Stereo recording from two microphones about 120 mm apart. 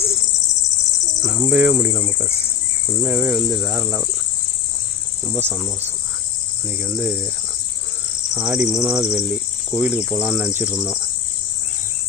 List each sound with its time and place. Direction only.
1.2 s cricket: 20° right (ahead or behind)
3.0 s cricket: 15° right (ahead or behind)
5.3 s speech: 20° right (ahead or behind)
6.8 s cricket: 10° right (ahead or behind)
8.4 s cricket: 10° right (ahead or behind)